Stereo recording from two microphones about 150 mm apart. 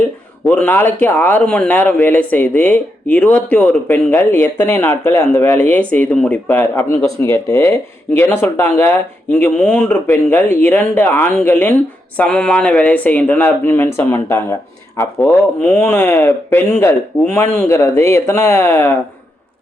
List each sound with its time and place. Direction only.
0.4 s a man's voice: 10° left (ahead or behind)